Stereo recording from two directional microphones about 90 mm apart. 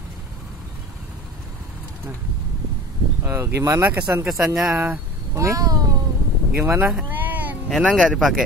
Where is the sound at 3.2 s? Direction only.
30° right (ahead or behind).